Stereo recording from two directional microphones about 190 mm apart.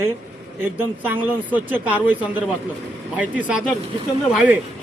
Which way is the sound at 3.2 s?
10° right (ahead or behind).